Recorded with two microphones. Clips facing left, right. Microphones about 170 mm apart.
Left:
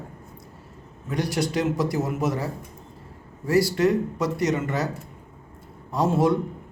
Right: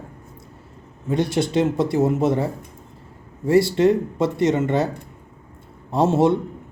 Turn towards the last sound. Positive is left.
turn(degrees=-25)  # may be behind; listen again after turning